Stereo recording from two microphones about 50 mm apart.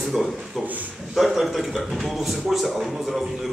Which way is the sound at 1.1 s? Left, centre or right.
Centre.